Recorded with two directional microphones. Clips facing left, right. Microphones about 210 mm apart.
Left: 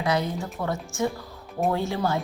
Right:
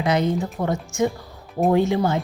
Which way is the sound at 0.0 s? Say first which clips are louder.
Right 5 dB; 20° right (ahead or behind).